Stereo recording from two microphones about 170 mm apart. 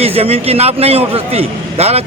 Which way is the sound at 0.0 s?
35° right (ahead or behind).